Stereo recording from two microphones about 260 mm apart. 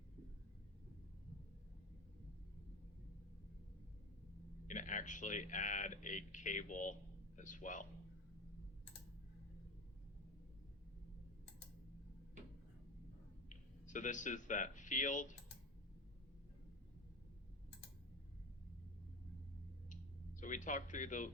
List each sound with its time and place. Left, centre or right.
4.7 s speech: left
13.5 s speech: left
19.9 s a sound: left